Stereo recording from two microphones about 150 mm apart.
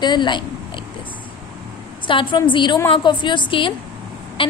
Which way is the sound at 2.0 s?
35° left (ahead or behind).